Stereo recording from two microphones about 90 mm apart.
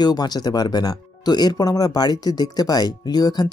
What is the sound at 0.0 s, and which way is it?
Speech, 50° left (ahead or behind).